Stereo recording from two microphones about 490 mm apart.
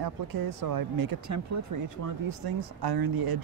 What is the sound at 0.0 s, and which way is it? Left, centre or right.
Speech, right.